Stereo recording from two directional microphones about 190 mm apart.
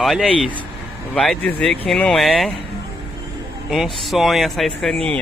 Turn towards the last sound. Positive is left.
turn(degrees=5)  # may be behind; listen again after turning